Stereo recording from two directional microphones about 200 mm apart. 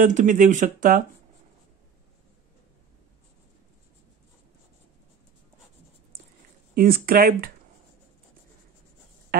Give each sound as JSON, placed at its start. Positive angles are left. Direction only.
{"t": 0.0, "sound": "speech", "side_deg": -40}
{"t": 6.7, "sound": "speech", "side_deg": -45}
{"t": 9.3, "sound": "a sound", "side_deg": -50}